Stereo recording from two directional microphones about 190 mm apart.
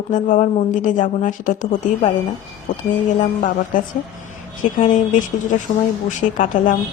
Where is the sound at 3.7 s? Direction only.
45° left (ahead or behind).